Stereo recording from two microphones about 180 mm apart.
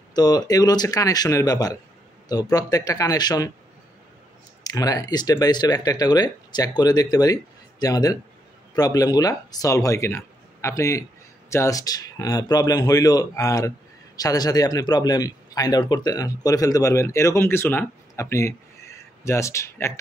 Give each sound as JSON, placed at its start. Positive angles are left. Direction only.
{"t": 0.1, "sound": "speech", "side_deg": 20}
{"t": 4.6, "sound": "speech", "side_deg": 20}